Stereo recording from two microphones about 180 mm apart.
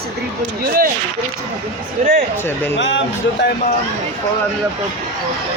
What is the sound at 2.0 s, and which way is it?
Speech, 45° right (ahead or behind).